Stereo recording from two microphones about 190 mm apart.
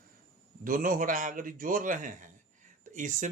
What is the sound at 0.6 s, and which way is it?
Speech, 45° right (ahead or behind).